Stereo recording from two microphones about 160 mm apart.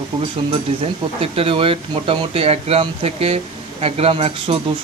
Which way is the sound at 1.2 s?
35° right (ahead or behind).